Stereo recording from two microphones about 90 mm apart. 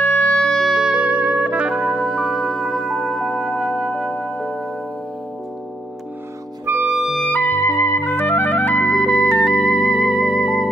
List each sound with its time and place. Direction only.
0.0 s wind instrument: 20° left (ahead or behind)
0.4 s music: centre (ahead or behind)
6.6 s music: 20° right (ahead or behind)
6.9 s clarinet: centre (ahead or behind)
7.2 s music: 20° left (ahead or behind)
7.6 s music: 30° left (ahead or behind); by 10.7 s 10° left (ahead or behind)